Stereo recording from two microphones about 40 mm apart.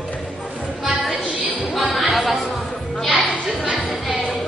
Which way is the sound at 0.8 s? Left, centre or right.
Centre.